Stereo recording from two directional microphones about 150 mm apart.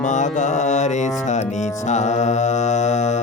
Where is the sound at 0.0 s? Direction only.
55° left (ahead or behind).